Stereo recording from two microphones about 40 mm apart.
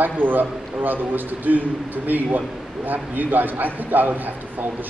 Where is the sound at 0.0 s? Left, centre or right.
Right.